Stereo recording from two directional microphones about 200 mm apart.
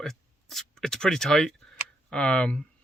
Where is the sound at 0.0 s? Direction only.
Centre (ahead or behind).